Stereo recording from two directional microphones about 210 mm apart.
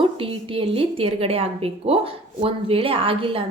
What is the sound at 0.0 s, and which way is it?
A woman's voice, 25° right (ahead or behind).